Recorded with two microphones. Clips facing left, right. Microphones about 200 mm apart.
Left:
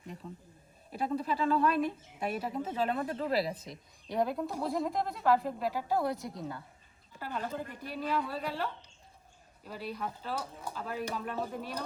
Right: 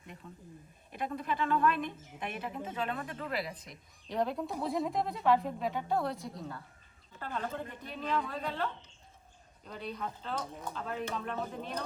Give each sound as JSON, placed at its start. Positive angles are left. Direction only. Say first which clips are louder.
{"t": 0.9, "sound": "speech", "louder": "left 3 dB", "side_deg": 35}
{"t": 4.1, "sound": "a woman's voice", "louder": "left 2 dB", "side_deg": 5}